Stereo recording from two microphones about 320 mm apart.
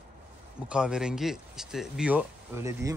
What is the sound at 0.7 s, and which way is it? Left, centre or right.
Speech, centre.